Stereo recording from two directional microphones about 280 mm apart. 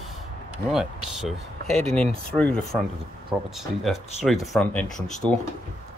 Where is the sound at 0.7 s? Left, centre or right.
Centre.